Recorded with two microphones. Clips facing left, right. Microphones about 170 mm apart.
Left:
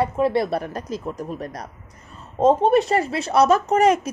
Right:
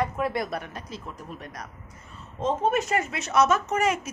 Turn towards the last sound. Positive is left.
turn(degrees=35)  # may be behind; listen again after turning